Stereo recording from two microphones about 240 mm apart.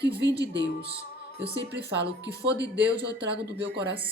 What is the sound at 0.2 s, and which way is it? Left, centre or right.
Speech, right.